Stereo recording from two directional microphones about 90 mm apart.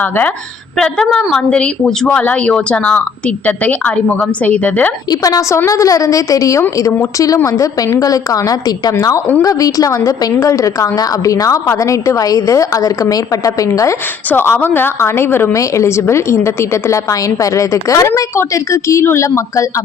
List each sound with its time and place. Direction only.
0.0 s a woman's voice: 20° left (ahead or behind)
5.1 s a woman's voice: 40° left (ahead or behind)
14.3 s a woman's voice: 25° left (ahead or behind)
15.5 s a woman's voice: 35° left (ahead or behind)